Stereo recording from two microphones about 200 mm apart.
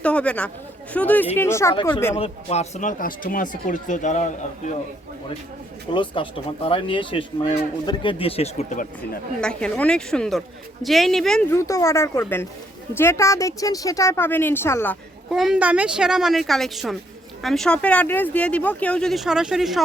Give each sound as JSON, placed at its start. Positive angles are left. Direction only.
{"t": 0.0, "sound": "a woman's voice", "side_deg": 5}
{"t": 2.1, "sound": "speech", "side_deg": 30}
{"t": 5.9, "sound": "speech", "side_deg": 25}
{"t": 9.4, "sound": "speech", "side_deg": 5}
{"t": 11.5, "sound": "a woman's voice", "side_deg": 15}
{"t": 15.3, "sound": "speech", "side_deg": -5}